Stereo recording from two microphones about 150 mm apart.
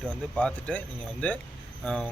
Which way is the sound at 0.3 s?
10° left (ahead or behind).